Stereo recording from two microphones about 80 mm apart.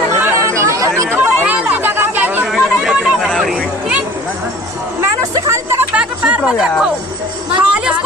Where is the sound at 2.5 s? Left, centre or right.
Centre.